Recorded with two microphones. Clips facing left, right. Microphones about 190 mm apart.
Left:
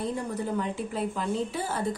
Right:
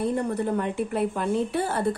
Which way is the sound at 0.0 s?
60° right (ahead or behind).